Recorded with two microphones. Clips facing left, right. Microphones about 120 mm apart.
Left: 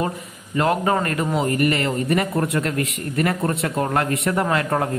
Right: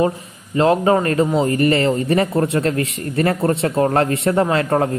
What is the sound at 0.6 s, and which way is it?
A man's voice, 25° right (ahead or behind).